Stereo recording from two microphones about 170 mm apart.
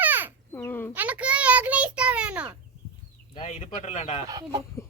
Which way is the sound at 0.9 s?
10° right (ahead or behind).